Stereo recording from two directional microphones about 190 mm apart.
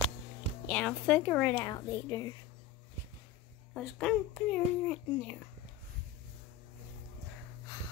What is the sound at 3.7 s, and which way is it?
A child's voice, centre (ahead or behind).